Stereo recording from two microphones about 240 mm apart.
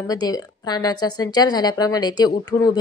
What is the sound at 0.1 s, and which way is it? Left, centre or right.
A woman's voice, centre.